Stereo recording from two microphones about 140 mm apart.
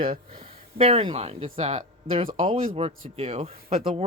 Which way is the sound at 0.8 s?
45° right (ahead or behind).